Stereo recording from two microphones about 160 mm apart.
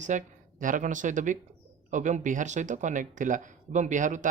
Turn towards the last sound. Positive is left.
turn(degrees=-50)  # may be behind; listen again after turning